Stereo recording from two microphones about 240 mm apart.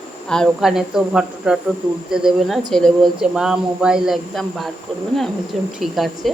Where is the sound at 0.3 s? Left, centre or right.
Centre.